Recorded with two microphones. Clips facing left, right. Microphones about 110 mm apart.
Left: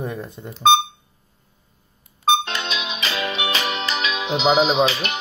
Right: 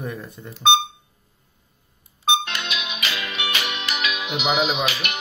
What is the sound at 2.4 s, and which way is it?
Music, 30° left (ahead or behind).